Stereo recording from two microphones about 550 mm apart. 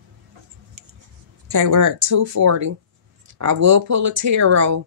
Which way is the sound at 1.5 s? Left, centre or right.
Right.